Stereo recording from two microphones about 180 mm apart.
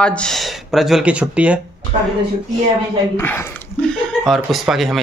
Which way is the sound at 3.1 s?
10° left (ahead or behind).